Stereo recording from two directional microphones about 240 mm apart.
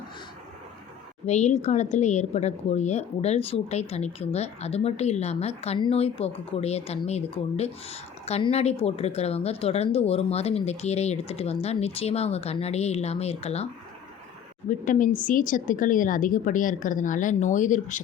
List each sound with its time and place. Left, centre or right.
1.3 s a woman's voice: left
14.7 s a woman's voice: left